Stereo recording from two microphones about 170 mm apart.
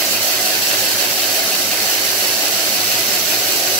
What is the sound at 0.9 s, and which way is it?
Engine, 5° left (ahead or behind).